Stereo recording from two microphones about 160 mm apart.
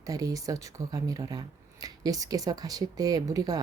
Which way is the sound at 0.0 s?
20° right (ahead or behind).